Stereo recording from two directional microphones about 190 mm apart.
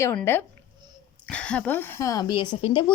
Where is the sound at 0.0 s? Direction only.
10° left (ahead or behind).